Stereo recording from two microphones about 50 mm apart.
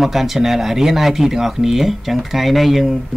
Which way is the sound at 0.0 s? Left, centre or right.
Centre.